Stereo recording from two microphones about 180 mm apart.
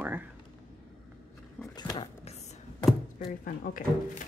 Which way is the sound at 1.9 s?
35° left (ahead or behind).